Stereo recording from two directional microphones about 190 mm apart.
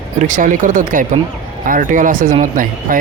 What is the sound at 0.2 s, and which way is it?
Speech, 40° right (ahead or behind).